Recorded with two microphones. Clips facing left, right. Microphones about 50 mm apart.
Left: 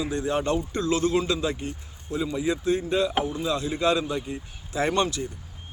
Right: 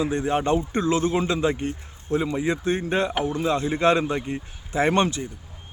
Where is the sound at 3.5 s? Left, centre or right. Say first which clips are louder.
Right 6 dB; right.